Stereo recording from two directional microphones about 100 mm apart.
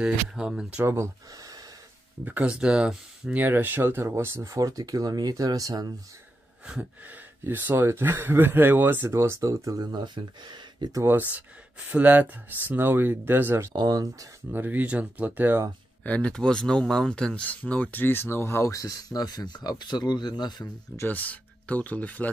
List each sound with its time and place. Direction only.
0.0 s speech: 10° right (ahead or behind)
0.8 s speech: 30° right (ahead or behind)
2.2 s speech: 15° right (ahead or behind)
3.4 s speech: 20° right (ahead or behind); by 5.9 s 40° right (ahead or behind)
6.6 s speech: 10° right (ahead or behind); by 11.0 s 45° right (ahead or behind)
11.0 s speech: 20° right (ahead or behind)
13.7 s speech: 45° right (ahead or behind)
14.5 s speech: 20° right (ahead or behind)
16.0 s speech: 10° left (ahead or behind); by 20.6 s 45° left (ahead or behind)
20.9 s speech: 20° left (ahead or behind)